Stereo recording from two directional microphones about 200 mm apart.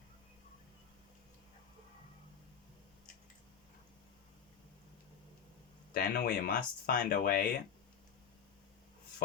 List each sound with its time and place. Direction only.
5.9 s speech: 50° left (ahead or behind)